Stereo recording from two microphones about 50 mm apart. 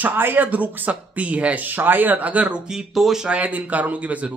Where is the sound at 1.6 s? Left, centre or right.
Right.